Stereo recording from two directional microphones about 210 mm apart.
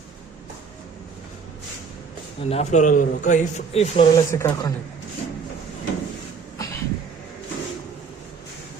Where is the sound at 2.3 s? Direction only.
30° left (ahead or behind).